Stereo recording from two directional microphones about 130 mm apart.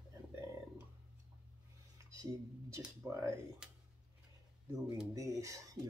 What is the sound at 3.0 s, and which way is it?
Speech, 25° right (ahead or behind).